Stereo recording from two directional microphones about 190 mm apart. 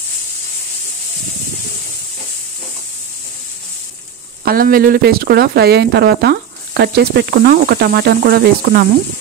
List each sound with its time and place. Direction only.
4.5 s speech: 50° right (ahead or behind)